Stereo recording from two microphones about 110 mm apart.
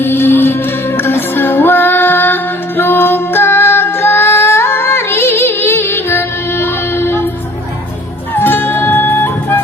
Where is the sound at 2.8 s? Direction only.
20° left (ahead or behind).